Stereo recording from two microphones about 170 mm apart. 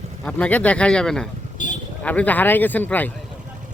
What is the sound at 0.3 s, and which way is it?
Speech, 10° left (ahead or behind).